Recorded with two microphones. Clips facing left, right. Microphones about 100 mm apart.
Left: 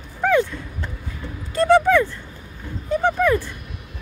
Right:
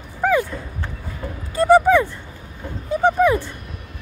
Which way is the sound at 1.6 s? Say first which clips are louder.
Right 2 dB; 10° right (ahead or behind).